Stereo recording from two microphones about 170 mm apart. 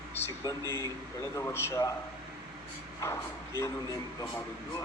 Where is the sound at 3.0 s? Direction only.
15° left (ahead or behind).